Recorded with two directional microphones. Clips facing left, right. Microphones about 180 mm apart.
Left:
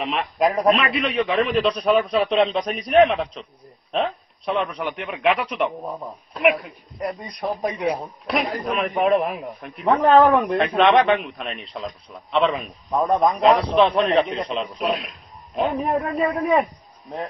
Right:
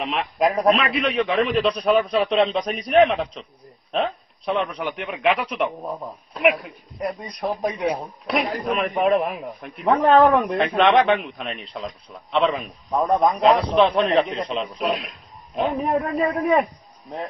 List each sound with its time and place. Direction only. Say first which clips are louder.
0.0 s a man's voice: even; centre (ahead or behind)